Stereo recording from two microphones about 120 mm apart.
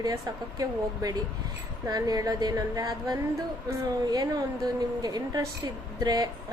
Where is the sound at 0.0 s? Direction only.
30° right (ahead or behind).